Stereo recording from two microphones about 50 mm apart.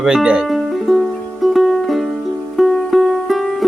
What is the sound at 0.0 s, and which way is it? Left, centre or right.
Speech, centre.